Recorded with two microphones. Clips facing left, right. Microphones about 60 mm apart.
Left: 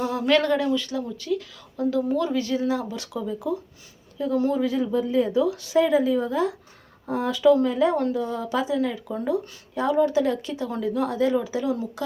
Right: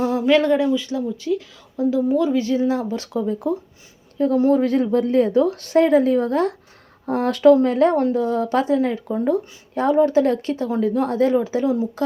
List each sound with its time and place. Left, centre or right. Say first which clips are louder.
0.0 s speech: right 4 dB; right
4.6 s a woman's voice: right 5 dB; right
9.0 s speech: right 5 dB; right